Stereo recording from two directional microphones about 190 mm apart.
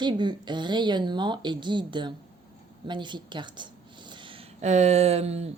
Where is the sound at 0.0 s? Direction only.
25° right (ahead or behind).